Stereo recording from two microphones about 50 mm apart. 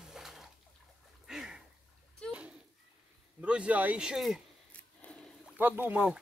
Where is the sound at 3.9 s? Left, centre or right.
Centre.